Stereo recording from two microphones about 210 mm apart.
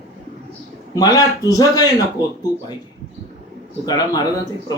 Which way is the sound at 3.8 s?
20° left (ahead or behind).